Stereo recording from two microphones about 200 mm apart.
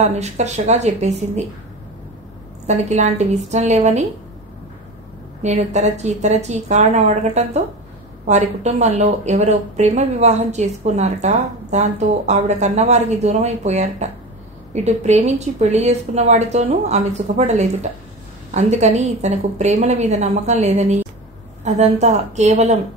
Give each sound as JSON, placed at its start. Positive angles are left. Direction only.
{"t": 0.0, "sound": "speech", "side_deg": -35}
{"t": 2.6, "sound": "speech", "side_deg": -35}
{"t": 5.4, "sound": "speech", "side_deg": -35}